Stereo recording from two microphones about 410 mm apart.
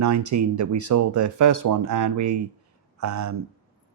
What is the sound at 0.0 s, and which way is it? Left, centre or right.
Speech, right.